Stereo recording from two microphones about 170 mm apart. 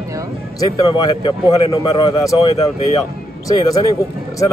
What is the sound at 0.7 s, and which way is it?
Speech, 20° left (ahead or behind).